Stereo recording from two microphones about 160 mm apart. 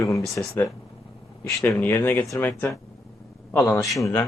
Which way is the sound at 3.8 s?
Centre (ahead or behind).